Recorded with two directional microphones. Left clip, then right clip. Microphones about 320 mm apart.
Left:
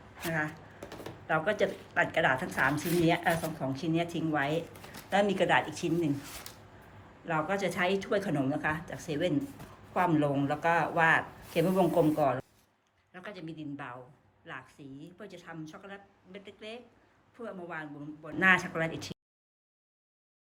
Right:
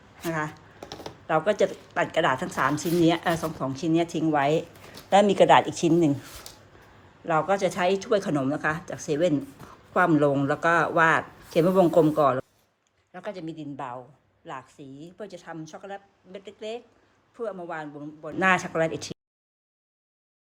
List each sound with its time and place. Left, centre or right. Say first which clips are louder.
0.3 s speech: right 4 dB; centre
7.3 s a woman's voice: right 8 dB; centre